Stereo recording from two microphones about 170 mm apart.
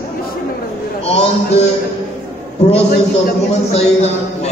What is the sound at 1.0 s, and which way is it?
Speech, 40° left (ahead or behind).